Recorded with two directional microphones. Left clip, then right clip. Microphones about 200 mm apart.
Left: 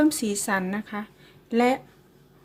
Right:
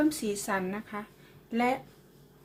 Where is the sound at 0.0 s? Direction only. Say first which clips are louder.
Left 6 dB; 40° left (ahead or behind).